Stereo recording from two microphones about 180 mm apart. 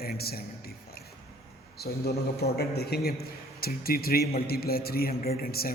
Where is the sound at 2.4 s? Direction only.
60° left (ahead or behind).